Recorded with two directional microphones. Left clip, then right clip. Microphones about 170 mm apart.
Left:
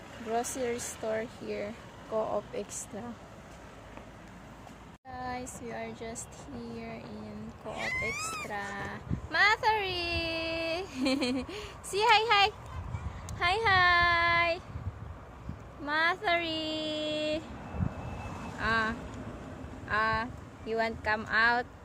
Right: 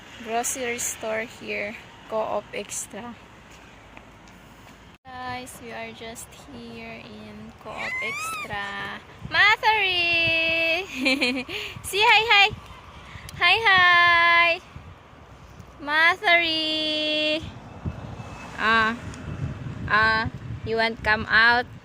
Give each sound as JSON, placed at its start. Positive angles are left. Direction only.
{"t": 0.3, "sound": "speech", "side_deg": -10}
{"t": 5.1, "sound": "speech", "side_deg": 0}
{"t": 8.4, "sound": "speech", "side_deg": -5}
{"t": 15.8, "sound": "speech", "side_deg": -25}
{"t": 18.5, "sound": "speech", "side_deg": -55}